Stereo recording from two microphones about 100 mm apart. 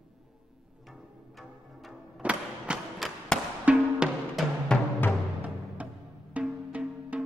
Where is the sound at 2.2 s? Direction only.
10° right (ahead or behind).